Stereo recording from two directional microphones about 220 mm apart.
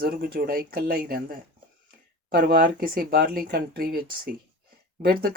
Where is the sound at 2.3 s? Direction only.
40° right (ahead or behind).